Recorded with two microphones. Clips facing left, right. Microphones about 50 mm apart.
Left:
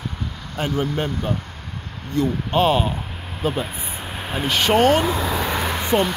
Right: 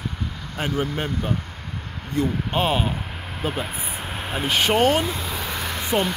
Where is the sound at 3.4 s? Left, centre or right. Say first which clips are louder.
Left 3 dB; centre.